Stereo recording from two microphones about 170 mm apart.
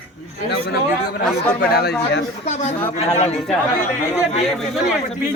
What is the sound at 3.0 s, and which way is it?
Speech, 40° left (ahead or behind).